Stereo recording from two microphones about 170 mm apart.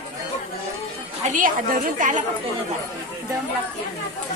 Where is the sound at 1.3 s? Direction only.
50° right (ahead or behind).